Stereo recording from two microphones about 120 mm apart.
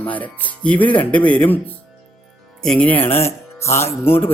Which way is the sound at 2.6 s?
10° left (ahead or behind).